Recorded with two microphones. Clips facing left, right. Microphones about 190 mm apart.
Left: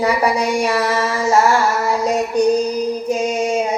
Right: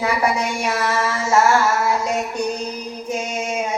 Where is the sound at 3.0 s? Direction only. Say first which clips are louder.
Left 3 dB; 35° left (ahead or behind).